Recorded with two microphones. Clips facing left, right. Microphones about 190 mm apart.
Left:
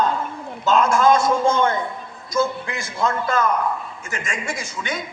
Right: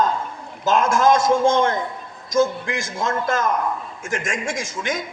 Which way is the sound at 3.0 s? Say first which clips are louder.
Left 2 dB; 45° right (ahead or behind).